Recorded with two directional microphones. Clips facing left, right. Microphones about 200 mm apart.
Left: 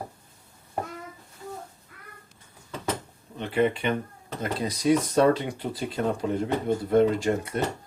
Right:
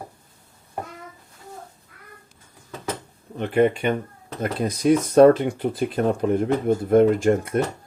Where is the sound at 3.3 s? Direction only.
50° right (ahead or behind).